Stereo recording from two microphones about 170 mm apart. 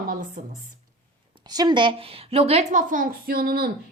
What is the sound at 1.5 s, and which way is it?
A woman's voice, 25° right (ahead or behind).